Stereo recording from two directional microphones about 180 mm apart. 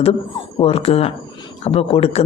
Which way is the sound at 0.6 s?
35° left (ahead or behind).